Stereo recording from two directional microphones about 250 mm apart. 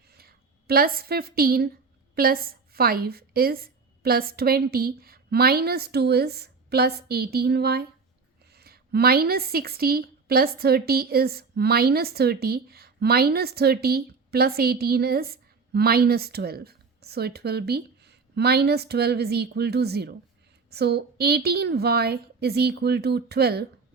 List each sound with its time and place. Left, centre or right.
0.1 s a woman's voice: right